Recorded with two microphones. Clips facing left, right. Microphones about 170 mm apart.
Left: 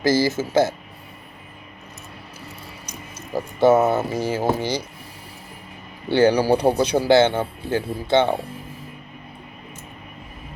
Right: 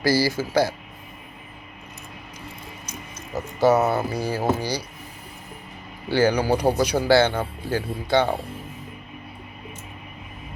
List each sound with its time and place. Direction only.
0.0 s speech: 20° left (ahead or behind)
3.3 s speech: 25° left (ahead or behind)
6.1 s speech: 25° left (ahead or behind)